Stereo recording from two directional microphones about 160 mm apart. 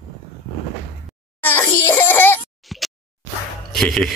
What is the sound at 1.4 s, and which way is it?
Wail, 10° left (ahead or behind).